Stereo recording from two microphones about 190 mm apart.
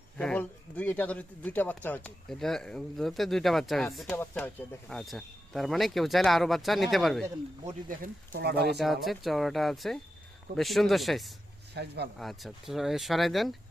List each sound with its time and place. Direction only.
0.2 s speech: 5° left (ahead or behind)
7.9 s speech: 45° right (ahead or behind)
8.8 s speech: centre (ahead or behind)
11.7 s speech: 60° right (ahead or behind)
12.2 s speech: centre (ahead or behind)